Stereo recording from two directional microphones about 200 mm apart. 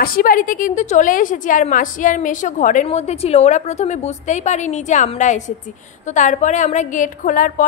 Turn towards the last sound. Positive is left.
turn(degrees=40)  # may be behind; listen again after turning